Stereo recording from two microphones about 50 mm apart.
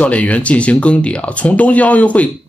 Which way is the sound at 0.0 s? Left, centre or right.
Left.